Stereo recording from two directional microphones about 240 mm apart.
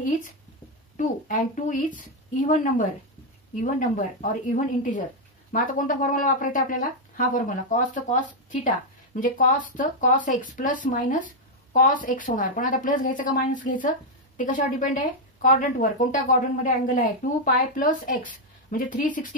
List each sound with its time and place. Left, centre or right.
0.9 s a woman's voice: left